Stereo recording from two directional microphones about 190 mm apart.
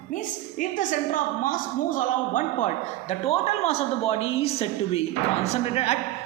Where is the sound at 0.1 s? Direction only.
45° left (ahead or behind).